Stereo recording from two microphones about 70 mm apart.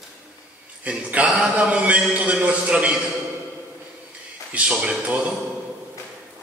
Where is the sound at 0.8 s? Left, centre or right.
Centre.